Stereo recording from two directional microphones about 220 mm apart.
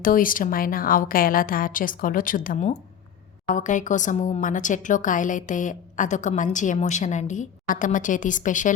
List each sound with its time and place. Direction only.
0.0 s a woman's voice: 40° left (ahead or behind)